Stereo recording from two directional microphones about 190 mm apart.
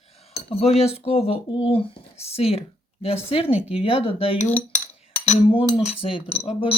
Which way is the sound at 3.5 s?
5° right (ahead or behind).